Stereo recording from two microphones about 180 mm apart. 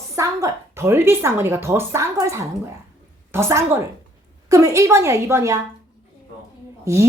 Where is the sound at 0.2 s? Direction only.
20° right (ahead or behind).